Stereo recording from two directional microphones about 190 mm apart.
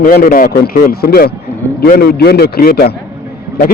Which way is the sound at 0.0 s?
50° left (ahead or behind).